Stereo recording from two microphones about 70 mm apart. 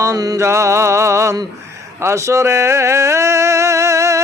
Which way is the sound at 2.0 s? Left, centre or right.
Right.